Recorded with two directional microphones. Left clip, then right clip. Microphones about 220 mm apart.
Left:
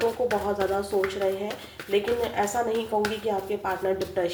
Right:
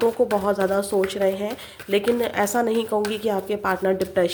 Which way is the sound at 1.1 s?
45° right (ahead or behind).